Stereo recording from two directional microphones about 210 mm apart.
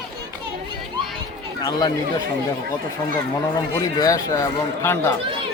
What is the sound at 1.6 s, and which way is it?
Speech, 20° left (ahead or behind).